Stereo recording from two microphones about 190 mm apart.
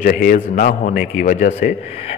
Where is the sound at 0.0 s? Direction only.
50° left (ahead or behind).